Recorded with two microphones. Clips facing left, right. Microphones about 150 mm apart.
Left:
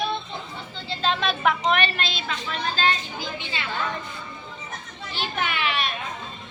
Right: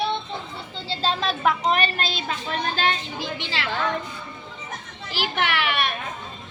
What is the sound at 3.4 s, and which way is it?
Speech, 75° right (ahead or behind).